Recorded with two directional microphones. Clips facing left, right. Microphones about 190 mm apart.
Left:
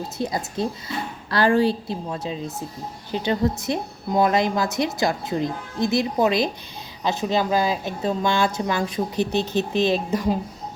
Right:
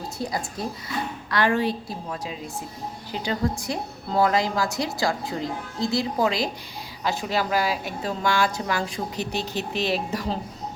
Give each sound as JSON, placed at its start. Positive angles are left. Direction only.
{"t": 0.2, "sound": "a woman's voice", "side_deg": 25}